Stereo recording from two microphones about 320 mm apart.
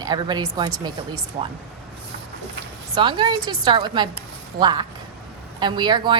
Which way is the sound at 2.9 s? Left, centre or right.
Centre.